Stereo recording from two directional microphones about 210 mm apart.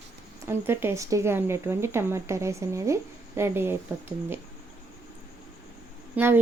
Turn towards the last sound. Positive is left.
turn(degrees=-5)  # may be behind; listen again after turning